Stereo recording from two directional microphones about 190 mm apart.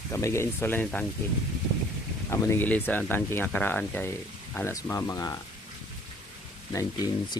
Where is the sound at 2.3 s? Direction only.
15° left (ahead or behind).